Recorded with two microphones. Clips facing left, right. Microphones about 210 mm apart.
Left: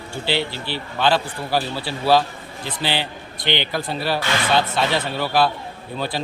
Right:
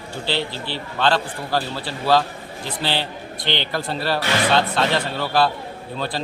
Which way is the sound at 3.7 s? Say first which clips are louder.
Even; centre (ahead or behind).